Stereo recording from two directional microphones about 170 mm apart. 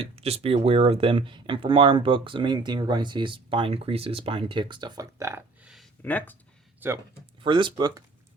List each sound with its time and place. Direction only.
0.0 s speech: 35° right (ahead or behind); by 5.4 s 15° right (ahead or behind)
5.6 s a sound: centre (ahead or behind)
6.0 s speech: 10° left (ahead or behind)
6.7 s speech: 15° right (ahead or behind)
7.4 s speech: 25° right (ahead or behind)